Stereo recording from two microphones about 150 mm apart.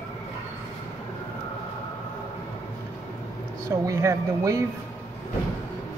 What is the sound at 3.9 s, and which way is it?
Speech, 20° right (ahead or behind).